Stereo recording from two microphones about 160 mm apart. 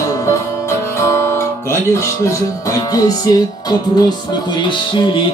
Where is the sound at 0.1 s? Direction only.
20° left (ahead or behind).